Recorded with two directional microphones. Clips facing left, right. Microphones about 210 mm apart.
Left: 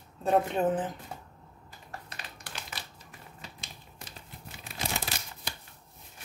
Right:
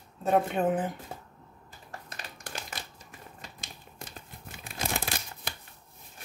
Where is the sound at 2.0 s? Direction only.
45° right (ahead or behind).